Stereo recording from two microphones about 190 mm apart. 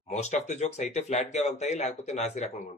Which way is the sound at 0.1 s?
35° left (ahead or behind).